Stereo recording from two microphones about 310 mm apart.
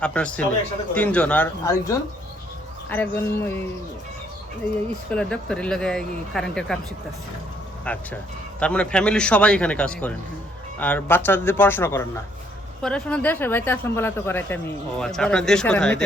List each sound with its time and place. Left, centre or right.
0.0 s speech: centre
5.1 s speech: centre
7.9 s speech: centre